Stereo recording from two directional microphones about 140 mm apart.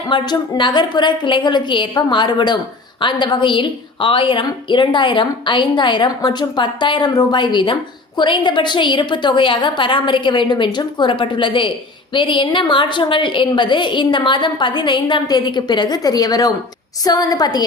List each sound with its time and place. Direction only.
0.1 s a woman's voice: 35° left (ahead or behind)